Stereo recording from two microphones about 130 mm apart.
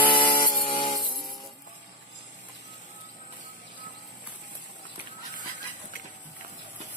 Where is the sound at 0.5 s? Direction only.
40° left (ahead or behind).